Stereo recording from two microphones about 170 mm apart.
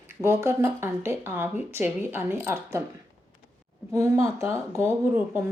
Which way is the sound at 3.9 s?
15° right (ahead or behind).